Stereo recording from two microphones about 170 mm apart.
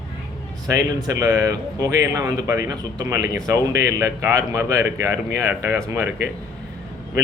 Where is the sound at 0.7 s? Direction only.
20° right (ahead or behind).